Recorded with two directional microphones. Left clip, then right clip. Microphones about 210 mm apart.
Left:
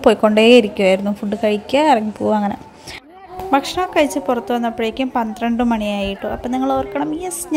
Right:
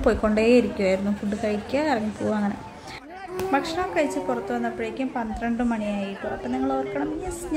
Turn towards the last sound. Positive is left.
turn(degrees=35)  # may be behind; listen again after turning